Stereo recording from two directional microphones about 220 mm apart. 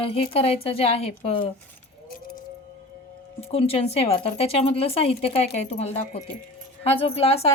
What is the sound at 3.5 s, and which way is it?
Speech, 25° left (ahead or behind).